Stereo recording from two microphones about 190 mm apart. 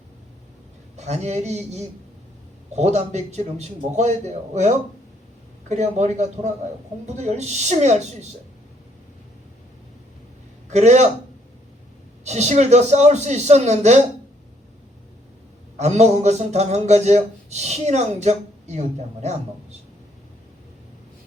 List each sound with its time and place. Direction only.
0.9 s speech: 35° right (ahead or behind)
10.7 s speech: 35° right (ahead or behind)
12.2 s speech: 35° right (ahead or behind)
15.8 s speech: 35° right (ahead or behind)